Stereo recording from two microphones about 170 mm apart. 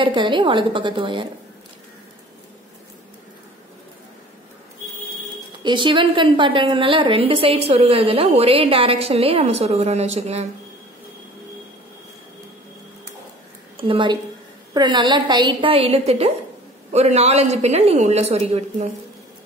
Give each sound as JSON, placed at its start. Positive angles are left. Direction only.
{"t": 0.0, "sound": "a woman's voice", "side_deg": -30}
{"t": 5.6, "sound": "a woman's voice", "side_deg": -30}
{"t": 13.7, "sound": "a woman's voice", "side_deg": -30}